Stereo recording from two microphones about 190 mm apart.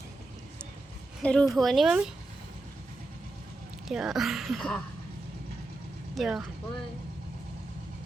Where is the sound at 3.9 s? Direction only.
Centre (ahead or behind).